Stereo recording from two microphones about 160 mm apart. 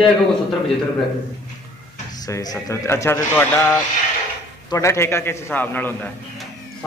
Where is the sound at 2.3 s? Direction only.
20° left (ahead or behind).